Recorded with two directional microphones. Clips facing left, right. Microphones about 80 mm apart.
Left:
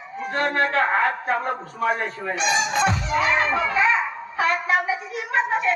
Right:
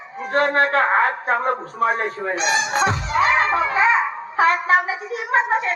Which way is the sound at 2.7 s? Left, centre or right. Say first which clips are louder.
Right 2 dB; right.